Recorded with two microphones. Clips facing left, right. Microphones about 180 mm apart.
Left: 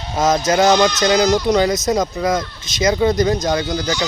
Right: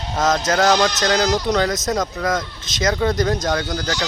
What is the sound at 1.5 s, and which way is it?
Speech, 5° left (ahead or behind).